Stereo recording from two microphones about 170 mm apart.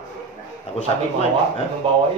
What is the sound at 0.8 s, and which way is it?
Speech, 35° left (ahead or behind).